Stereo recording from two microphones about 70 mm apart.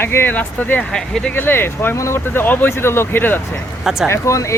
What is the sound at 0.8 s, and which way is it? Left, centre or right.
Speech, centre.